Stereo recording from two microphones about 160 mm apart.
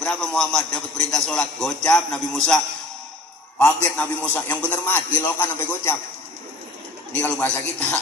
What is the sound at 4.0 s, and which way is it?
A man's voice, 10° left (ahead or behind).